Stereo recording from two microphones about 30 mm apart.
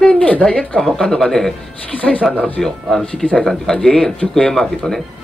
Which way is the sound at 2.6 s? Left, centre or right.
Centre.